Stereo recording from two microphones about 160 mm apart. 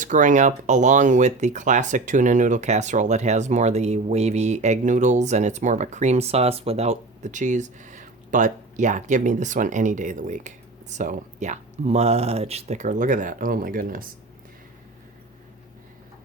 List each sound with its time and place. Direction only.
0.0 s speech: 50° right (ahead or behind)